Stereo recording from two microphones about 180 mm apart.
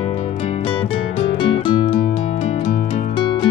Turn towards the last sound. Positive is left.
turn(degrees=40)  # may be behind; listen again after turning